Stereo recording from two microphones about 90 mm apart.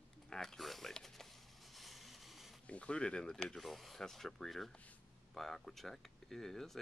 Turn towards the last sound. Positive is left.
turn(degrees=5)  # may be behind; listen again after turning